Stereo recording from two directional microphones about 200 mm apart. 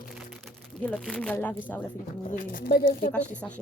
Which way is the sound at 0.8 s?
5° left (ahead or behind).